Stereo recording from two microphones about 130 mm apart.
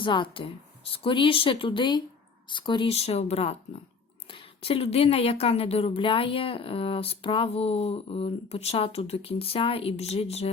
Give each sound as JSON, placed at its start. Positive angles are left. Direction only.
{"t": 0.0, "sound": "a woman's voice", "side_deg": 40}